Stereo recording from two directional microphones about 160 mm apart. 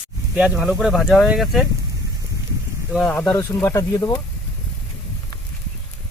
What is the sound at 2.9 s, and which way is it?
Speech, 5° left (ahead or behind).